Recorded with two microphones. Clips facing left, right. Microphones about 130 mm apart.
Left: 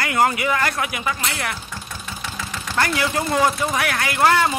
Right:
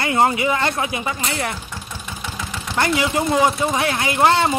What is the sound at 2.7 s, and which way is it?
Speech, 20° right (ahead or behind).